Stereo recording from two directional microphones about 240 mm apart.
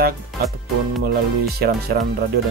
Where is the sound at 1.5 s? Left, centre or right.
Right.